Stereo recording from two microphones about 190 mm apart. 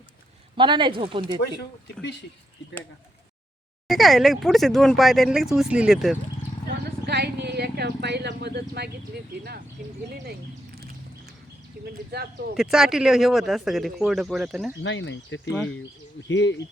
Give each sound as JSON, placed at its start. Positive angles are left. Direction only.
{"t": 0.5, "sound": "speech", "side_deg": -25}
{"t": 3.8, "sound": "speech", "side_deg": 0}
{"t": 7.0, "sound": "speech", "side_deg": -60}
{"t": 11.9, "sound": "speech", "side_deg": -55}
{"t": 12.5, "sound": "speech", "side_deg": 0}
{"t": 14.8, "sound": "speech", "side_deg": 75}